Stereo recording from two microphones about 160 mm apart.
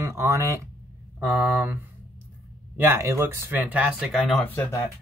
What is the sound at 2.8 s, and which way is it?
Speech, 15° right (ahead or behind).